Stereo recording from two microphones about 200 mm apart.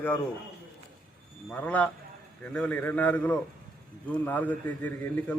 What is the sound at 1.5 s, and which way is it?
A man's voice, 5° left (ahead or behind).